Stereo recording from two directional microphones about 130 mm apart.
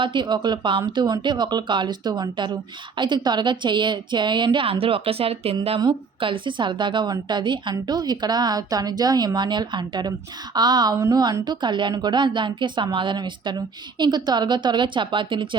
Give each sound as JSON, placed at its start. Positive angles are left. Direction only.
{"t": 0.0, "sound": "a woman's voice", "side_deg": -35}